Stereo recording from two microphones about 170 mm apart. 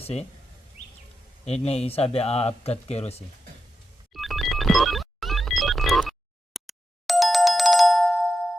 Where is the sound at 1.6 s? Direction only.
35° left (ahead or behind).